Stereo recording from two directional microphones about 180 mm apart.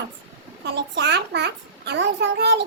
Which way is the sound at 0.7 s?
70° right (ahead or behind).